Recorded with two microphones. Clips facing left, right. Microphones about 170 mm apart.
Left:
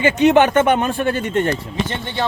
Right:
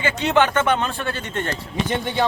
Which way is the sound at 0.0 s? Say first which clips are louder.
Left 6 dB; 15° left (ahead or behind).